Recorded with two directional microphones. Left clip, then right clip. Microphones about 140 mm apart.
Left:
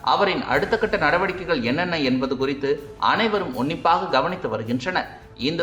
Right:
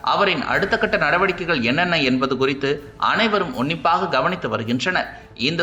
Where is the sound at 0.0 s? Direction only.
15° right (ahead or behind).